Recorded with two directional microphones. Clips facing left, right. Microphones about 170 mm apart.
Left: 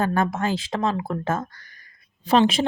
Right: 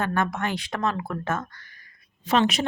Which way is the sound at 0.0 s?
30° left (ahead or behind).